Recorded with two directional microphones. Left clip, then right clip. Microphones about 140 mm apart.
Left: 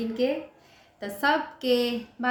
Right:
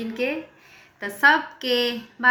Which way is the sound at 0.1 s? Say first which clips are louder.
Right 1 dB; 40° left (ahead or behind).